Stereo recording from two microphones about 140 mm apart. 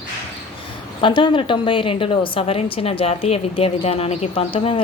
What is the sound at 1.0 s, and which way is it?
A woman's voice, 35° left (ahead or behind).